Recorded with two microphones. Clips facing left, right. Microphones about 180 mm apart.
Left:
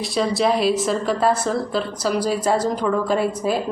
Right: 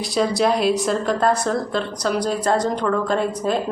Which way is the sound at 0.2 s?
Centre (ahead or behind).